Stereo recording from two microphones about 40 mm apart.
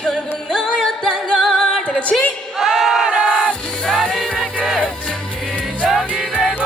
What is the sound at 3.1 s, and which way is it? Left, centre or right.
Music, right.